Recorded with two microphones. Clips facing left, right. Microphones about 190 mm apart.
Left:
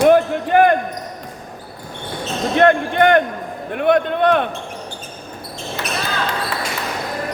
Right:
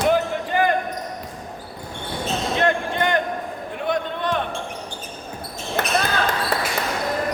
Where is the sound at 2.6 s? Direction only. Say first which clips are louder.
Left 9 dB; 60° left (ahead or behind).